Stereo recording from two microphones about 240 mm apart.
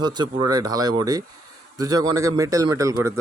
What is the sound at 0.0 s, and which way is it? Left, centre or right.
A man's voice, centre.